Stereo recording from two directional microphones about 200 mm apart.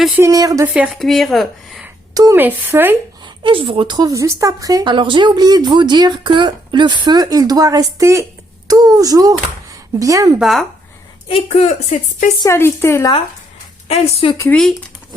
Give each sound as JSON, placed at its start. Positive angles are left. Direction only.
{"t": 0.2, "sound": "speech", "side_deg": -15}
{"t": 0.7, "sound": "speech", "side_deg": -5}
{"t": 2.1, "sound": "speech", "side_deg": -15}
{"t": 3.2, "sound": "a woman's voice", "side_deg": -25}
{"t": 10.3, "sound": "speech", "side_deg": 0}
{"t": 11.3, "sound": "a woman's voice", "side_deg": 30}
{"t": 12.4, "sound": "a woman's voice", "side_deg": 15}
{"t": 13.8, "sound": "a woman's voice", "side_deg": 30}
{"t": 14.3, "sound": "a woman's voice", "side_deg": 15}